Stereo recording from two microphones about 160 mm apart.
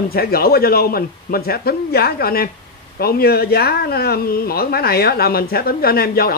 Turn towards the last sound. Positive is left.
turn(degrees=75)  # may be behind; listen again after turning